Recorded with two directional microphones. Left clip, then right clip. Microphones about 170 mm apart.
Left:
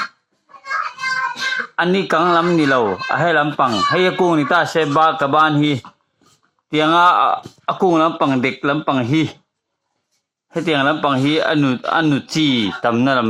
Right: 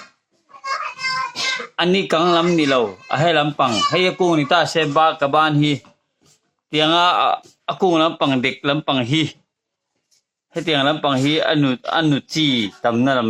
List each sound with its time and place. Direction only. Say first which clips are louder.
0.5 s a sound: left 2 dB; 30° left (ahead or behind)
2.1 s speech: left 2 dB; 35° left (ahead or behind)
10.5 s speech: left 1 dB; 30° left (ahead or behind)